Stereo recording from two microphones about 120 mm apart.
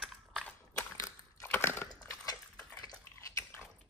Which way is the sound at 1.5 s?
20° left (ahead or behind).